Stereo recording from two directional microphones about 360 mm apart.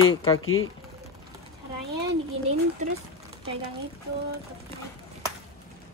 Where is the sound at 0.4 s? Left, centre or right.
Left.